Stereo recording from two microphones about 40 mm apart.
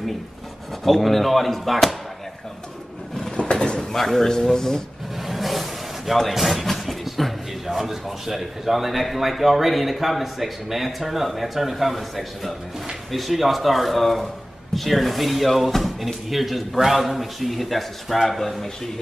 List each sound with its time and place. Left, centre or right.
0.8 s speech: centre
3.3 s drawer open or close: left
3.9 s a man's voice: centre
5.2 s speech: centre